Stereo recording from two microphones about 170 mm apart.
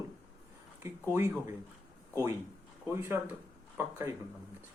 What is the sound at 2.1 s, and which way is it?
Speech, 15° right (ahead or behind).